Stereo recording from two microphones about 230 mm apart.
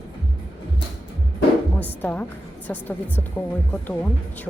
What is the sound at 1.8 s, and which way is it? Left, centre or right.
Speech, centre.